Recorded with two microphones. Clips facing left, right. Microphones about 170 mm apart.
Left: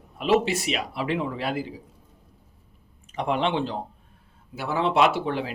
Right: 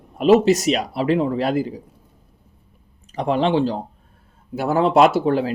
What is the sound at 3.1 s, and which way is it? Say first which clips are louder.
Speech: right 6 dB; 35° right (ahead or behind).